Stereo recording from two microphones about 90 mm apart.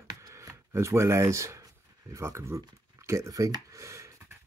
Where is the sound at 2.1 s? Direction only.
30° right (ahead or behind).